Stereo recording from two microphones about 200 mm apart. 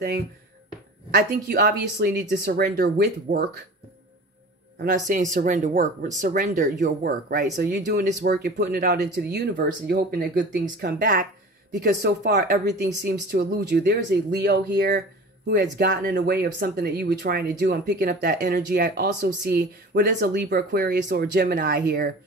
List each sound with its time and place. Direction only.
1.1 s speech: 55° right (ahead or behind)
4.7 s speech: 40° right (ahead or behind); by 9.7 s 55° right (ahead or behind)
9.7 s speech: 45° right (ahead or behind)
11.8 s speech: 55° right (ahead or behind)